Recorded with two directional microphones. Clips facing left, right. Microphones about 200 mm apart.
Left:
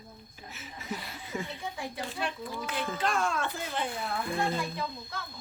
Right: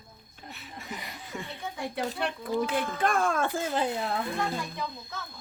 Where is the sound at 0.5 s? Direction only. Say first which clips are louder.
Left 2 dB; centre (ahead or behind).